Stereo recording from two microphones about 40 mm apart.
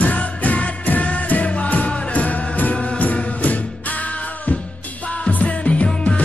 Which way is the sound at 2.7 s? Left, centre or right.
Left.